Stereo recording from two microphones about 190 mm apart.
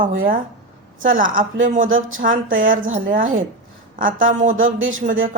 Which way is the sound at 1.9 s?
90° right.